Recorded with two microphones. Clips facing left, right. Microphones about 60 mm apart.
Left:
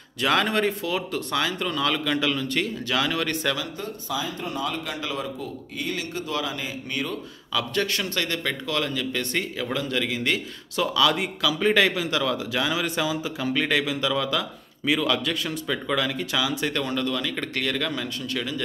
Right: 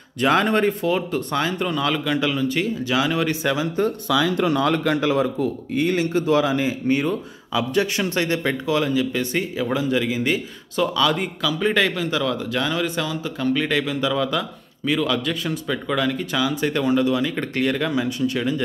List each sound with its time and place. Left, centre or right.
0.2 s speech: centre
0.7 s speech: centre
4.1 s speech: right
5.1 s speech: right
7.7 s speech: centre
16.7 s speech: centre